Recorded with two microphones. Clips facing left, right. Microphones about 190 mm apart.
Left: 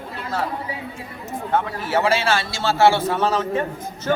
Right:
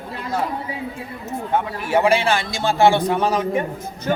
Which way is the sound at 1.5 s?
15° right (ahead or behind).